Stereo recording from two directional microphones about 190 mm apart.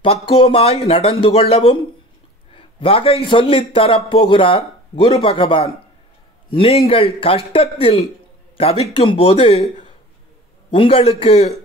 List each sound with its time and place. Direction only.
0.0 s a man's voice: 25° left (ahead or behind)